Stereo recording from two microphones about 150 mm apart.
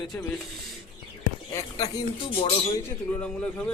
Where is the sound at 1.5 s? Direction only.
25° left (ahead or behind).